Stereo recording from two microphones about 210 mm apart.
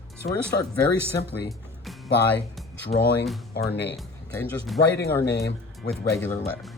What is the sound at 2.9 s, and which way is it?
Speech, 30° left (ahead or behind).